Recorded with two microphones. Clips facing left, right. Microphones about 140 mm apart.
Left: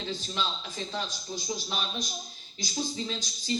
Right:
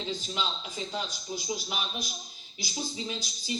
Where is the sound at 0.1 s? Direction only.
15° right (ahead or behind).